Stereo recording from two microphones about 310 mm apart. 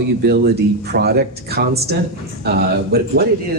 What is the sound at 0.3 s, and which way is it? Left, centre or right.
Speech, right.